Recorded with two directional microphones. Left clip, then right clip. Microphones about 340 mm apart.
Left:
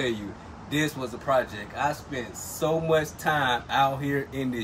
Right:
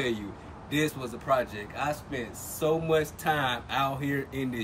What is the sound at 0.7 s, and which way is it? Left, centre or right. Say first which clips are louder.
Speech: left 1 dB; centre.